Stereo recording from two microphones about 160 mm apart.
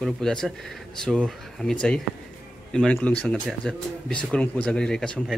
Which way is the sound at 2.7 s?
5° left (ahead or behind).